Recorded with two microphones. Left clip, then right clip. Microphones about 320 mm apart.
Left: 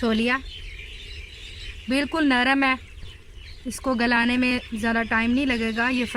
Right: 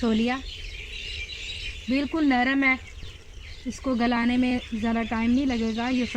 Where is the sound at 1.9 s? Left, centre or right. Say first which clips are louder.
Left 2 dB; left.